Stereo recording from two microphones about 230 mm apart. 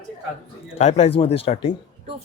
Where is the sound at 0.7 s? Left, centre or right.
Left.